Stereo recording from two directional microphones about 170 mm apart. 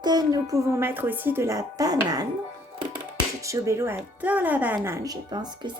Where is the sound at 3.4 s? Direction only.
15° right (ahead or behind).